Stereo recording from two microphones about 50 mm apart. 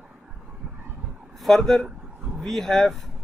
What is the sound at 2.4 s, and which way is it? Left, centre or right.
Speech, centre.